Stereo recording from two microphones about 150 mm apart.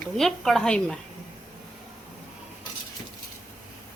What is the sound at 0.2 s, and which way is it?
Speech, 5° left (ahead or behind).